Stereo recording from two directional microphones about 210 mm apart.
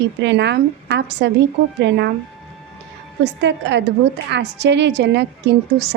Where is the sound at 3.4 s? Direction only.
55° right (ahead or behind).